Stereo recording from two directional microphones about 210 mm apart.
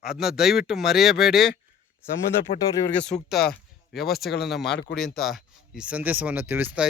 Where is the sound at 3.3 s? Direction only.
Centre (ahead or behind).